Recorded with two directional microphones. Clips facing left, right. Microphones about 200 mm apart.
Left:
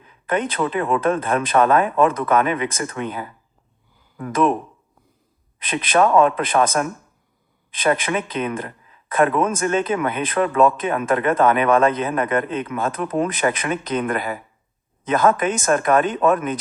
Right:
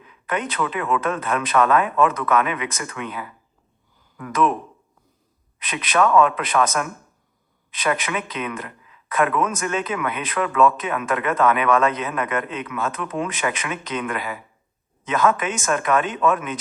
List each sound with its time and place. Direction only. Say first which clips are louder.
0.0 s speech: left 4 dB; 30° left (ahead or behind)
5.5 s a man's voice: left 3 dB; 30° left (ahead or behind)